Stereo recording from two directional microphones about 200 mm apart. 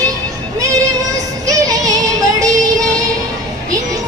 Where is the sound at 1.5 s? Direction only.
15° right (ahead or behind).